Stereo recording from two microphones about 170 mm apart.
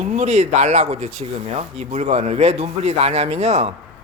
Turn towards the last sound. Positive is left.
turn(degrees=-40)  # may be behind; listen again after turning